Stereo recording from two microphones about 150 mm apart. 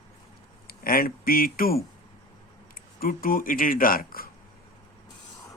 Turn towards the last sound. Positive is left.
turn(degrees=75)  # may be behind; listen again after turning